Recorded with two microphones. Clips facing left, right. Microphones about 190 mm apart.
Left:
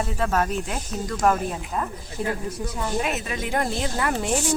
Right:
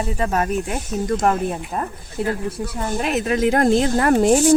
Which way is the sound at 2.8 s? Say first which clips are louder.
Right 4 dB; 50° right (ahead or behind).